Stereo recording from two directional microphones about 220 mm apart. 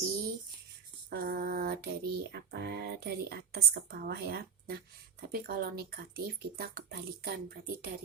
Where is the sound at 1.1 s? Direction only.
45° right (ahead or behind).